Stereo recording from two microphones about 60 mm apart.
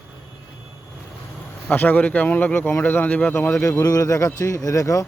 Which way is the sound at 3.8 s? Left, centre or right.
Left.